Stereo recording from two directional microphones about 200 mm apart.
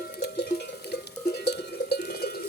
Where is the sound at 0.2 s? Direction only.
55° left (ahead or behind).